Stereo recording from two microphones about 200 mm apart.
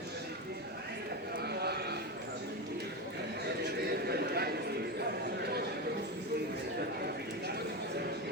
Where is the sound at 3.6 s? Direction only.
50° right (ahead or behind).